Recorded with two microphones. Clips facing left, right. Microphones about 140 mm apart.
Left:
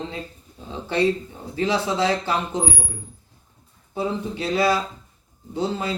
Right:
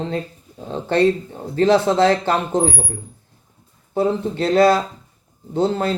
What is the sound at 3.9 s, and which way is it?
A man's voice, 50° right (ahead or behind).